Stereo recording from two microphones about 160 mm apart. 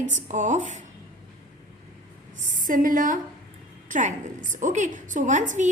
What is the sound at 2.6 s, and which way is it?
A woman's voice, 60° right (ahead or behind).